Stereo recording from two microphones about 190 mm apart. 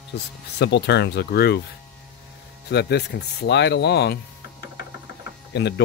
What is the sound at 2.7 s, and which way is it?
Speech, 60° left (ahead or behind).